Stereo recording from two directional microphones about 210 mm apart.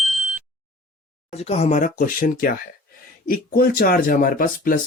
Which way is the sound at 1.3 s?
30° left (ahead or behind).